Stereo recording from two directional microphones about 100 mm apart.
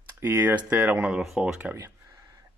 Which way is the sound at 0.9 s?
10° right (ahead or behind).